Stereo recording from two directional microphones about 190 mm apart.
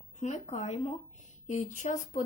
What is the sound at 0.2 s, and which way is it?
Speech, 35° left (ahead or behind).